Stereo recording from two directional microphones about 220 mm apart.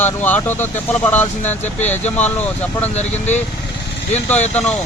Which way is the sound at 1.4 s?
30° left (ahead or behind).